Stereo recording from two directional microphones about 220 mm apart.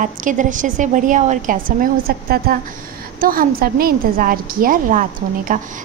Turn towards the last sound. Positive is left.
turn(degrees=-35)  # may be behind; listen again after turning